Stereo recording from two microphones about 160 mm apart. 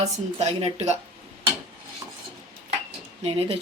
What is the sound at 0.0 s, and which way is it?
Speech, 45° right (ahead or behind).